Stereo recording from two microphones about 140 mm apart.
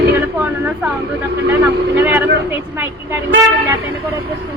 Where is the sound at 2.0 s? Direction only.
15° right (ahead or behind).